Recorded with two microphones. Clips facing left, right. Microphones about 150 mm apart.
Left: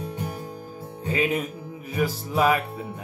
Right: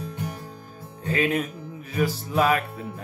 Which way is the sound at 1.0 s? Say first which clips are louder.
Right 1 dB; 10° left (ahead or behind).